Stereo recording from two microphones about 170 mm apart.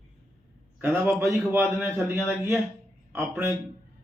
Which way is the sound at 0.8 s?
15° right (ahead or behind).